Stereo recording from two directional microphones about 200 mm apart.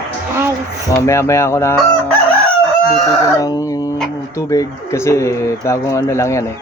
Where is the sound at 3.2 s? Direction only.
15° left (ahead or behind).